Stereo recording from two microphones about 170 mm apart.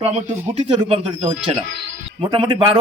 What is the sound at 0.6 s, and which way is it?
Speech, 30° right (ahead or behind).